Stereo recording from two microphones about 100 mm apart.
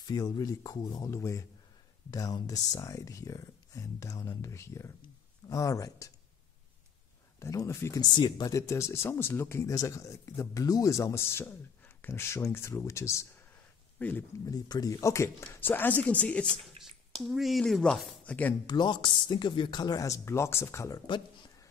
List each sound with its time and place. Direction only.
0.0 s speech: 40° left (ahead or behind)
1.1 s speech: 30° left (ahead or behind)
7.3 s speech: 30° left (ahead or behind)
8.0 s speech: 45° left (ahead or behind); by 13.3 s 30° left (ahead or behind)
13.9 s speech: 15° left (ahead or behind)
14.4 s speech: 40° left (ahead or behind); by 16.5 s 10° left (ahead or behind)
16.8 s a sound: 80° right
17.3 s speech: centre (ahead or behind)
18.2 s speech: 15° left (ahead or behind)
18.7 s speech: 45° left (ahead or behind); by 21.0 s 30° left (ahead or behind)